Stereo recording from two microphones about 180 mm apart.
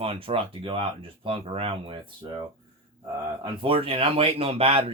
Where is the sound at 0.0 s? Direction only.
30° right (ahead or behind).